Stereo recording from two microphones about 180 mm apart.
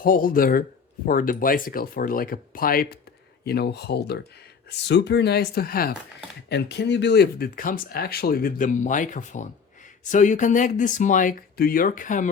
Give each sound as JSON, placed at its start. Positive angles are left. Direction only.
{"t": 0.0, "sound": "speech", "side_deg": 50}
{"t": 6.5, "sound": "speech", "side_deg": 70}